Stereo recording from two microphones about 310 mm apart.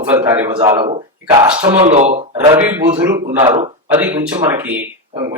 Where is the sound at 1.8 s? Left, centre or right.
Right.